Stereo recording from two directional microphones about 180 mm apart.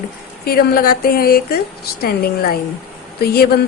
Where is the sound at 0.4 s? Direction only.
55° left (ahead or behind).